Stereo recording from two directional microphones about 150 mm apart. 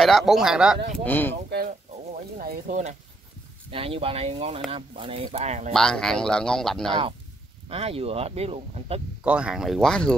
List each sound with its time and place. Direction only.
0.0 s a man's voice: centre (ahead or behind)
0.9 s speech: 10° left (ahead or behind)
2.3 s speech: 60° right (ahead or behind)
3.7 s speech: 40° right (ahead or behind)
5.7 s a man's voice: 5° left (ahead or behind)
6.9 s speech: 40° right (ahead or behind)
9.2 s a man's voice: 5° right (ahead or behind)